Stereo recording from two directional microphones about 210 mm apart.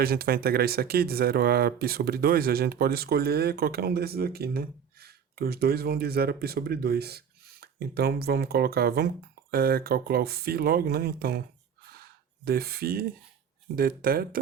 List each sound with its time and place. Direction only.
0.0 s speech: 45° right (ahead or behind)
12.5 s speech: 45° right (ahead or behind)